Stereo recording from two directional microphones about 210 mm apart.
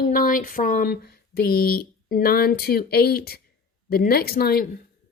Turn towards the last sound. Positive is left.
turn(degrees=45)  # may be behind; listen again after turning